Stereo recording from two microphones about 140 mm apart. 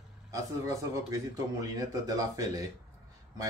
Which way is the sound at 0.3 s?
25° right (ahead or behind).